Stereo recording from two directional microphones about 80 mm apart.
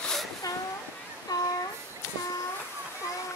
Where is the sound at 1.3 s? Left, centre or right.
Left.